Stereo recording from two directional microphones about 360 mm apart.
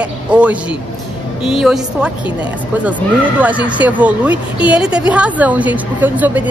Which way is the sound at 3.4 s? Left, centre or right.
Centre.